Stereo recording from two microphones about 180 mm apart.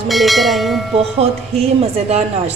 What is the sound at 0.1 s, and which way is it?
Speech, centre (ahead or behind).